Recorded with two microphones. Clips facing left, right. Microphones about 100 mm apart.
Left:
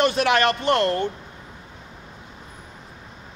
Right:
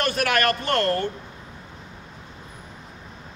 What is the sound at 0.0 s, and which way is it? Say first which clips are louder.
A man's voice: left 3 dB; 20° left (ahead or behind).